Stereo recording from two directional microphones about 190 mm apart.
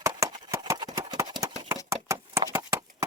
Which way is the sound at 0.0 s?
15° right (ahead or behind).